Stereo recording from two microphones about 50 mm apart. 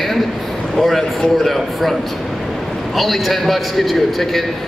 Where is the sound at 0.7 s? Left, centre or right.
Centre.